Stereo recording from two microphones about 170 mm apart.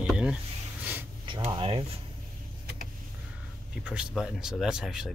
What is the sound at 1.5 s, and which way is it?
Speech, 30° right (ahead or behind).